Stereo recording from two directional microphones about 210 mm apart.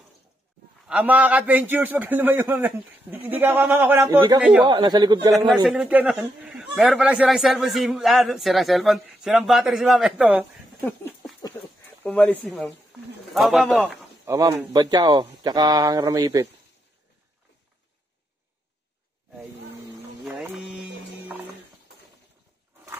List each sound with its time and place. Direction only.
0.8 s a man's voice: 5° right (ahead or behind)
4.6 s speech: 20° right (ahead or behind)
5.5 s speech: 5° right (ahead or behind)
10.9 s a sound: 10° left (ahead or behind)
12.0 s a man's voice: 5° left (ahead or behind); by 16.4 s 15° right (ahead or behind)
20.2 s clip-clop: 5° right (ahead or behind)